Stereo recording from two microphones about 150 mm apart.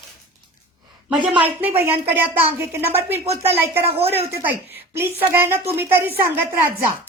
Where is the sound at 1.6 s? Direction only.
15° right (ahead or behind).